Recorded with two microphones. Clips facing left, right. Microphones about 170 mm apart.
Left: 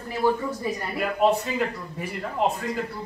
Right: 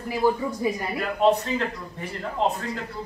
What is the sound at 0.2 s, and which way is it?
Speech, 10° right (ahead or behind).